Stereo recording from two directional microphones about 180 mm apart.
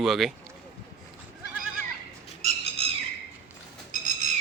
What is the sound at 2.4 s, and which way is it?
Bird, 30° right (ahead or behind).